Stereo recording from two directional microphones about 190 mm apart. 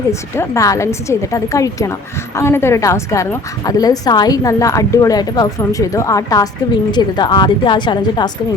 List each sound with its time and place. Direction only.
0.1 s a woman's voice: 15° left (ahead or behind)